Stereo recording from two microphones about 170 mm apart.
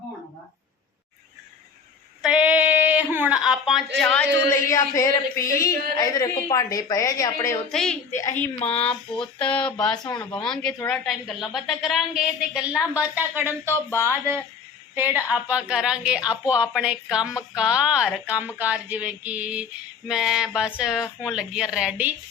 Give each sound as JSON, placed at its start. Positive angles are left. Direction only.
{"t": 2.2, "sound": "speech", "side_deg": -5}
{"t": 7.7, "sound": "a woman's voice", "side_deg": 5}
{"t": 8.2, "sound": "speech", "side_deg": 15}
{"t": 10.0, "sound": "speech", "side_deg": 25}
{"t": 10.3, "sound": "a woman's voice", "side_deg": 5}